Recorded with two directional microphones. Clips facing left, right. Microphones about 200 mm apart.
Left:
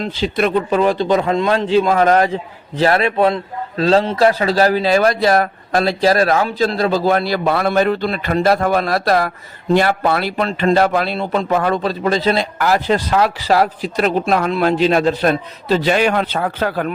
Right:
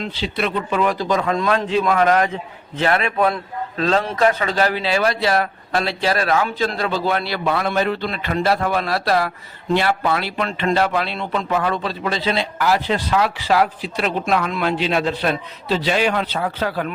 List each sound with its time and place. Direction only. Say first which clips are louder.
0.0 s speech: left 6 dB; 45° left (ahead or behind)
0.8 s a man's voice: left 3 dB; 30° left (ahead or behind); by 16.9 s 50° left (ahead or behind)